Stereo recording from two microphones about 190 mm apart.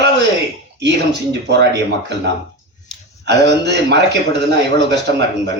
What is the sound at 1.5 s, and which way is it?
Speech, 65° right (ahead or behind).